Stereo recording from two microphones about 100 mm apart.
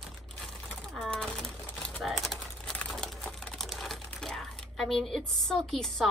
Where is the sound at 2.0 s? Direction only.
Centre (ahead or behind).